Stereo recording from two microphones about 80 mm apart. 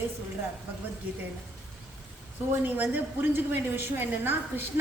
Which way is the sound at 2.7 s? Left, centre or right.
Right.